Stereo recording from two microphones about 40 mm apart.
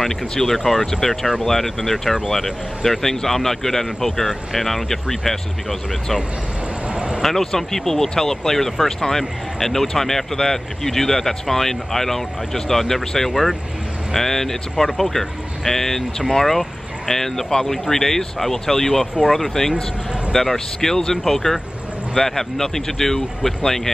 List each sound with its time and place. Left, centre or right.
0.3 s speech: centre
6.9 s vehicle: right
7.2 s speech: centre